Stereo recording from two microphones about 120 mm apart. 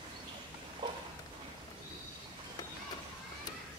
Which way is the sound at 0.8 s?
40° right (ahead or behind).